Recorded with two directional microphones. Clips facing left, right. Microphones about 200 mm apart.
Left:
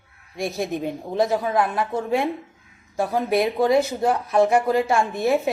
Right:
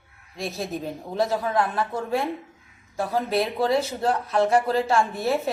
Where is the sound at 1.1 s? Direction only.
20° left (ahead or behind).